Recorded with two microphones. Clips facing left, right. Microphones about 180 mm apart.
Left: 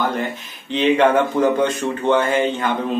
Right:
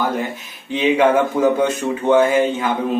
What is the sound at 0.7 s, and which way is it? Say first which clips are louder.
Speech: even; 5° right (ahead or behind).